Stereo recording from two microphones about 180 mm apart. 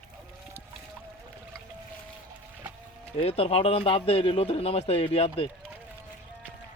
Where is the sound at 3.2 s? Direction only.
35° left (ahead or behind).